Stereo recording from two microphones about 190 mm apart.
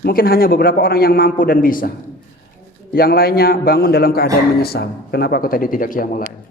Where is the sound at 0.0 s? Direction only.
50° left (ahead or behind).